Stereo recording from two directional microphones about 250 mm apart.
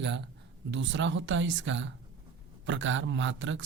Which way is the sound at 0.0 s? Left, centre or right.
Right.